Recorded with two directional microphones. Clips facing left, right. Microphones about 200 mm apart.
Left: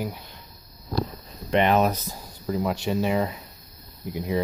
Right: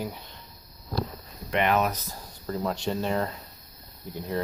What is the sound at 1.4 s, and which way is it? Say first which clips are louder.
Speech: left 4 dB; 30° left (ahead or behind).